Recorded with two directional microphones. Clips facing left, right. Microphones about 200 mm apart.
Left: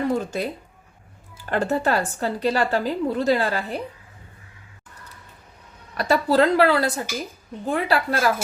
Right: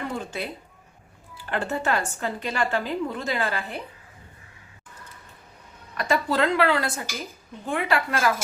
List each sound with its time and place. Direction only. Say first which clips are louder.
0.1 s a woman's voice: left 7 dB; 40° left (ahead or behind)
6.0 s a woman's voice: left 5 dB; 35° left (ahead or behind)